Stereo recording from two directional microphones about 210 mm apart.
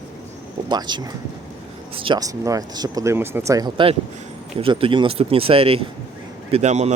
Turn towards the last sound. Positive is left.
turn(degrees=-30)  # may be behind; listen again after turning